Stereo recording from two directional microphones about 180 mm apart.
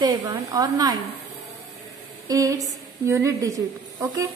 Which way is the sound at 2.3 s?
20° right (ahead or behind).